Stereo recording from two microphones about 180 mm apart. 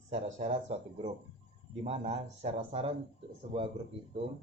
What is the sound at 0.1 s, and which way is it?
Speech, 40° right (ahead or behind).